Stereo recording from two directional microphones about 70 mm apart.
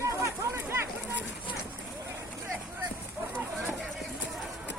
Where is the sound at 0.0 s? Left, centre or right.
Right.